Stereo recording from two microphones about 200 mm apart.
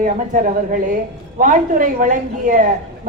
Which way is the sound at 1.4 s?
40° right (ahead or behind).